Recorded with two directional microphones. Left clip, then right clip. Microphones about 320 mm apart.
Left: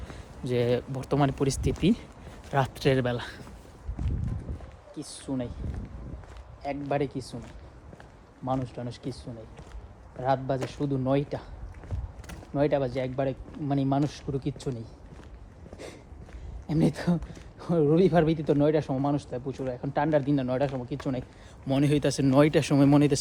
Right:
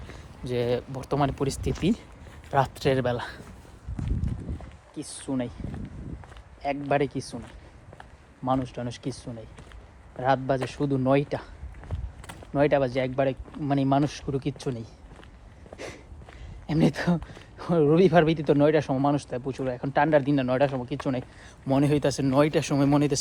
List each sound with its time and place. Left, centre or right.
0.1 s speech: centre
5.0 s speech: right
6.6 s speech: right
8.4 s speech: right
12.5 s speech: right
16.6 s speech: right
21.7 s speech: centre